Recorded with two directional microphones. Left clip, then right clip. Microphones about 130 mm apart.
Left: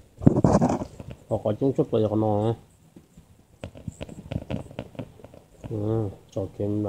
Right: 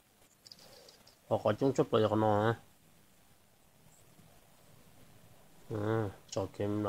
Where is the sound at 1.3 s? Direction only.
50° right (ahead or behind).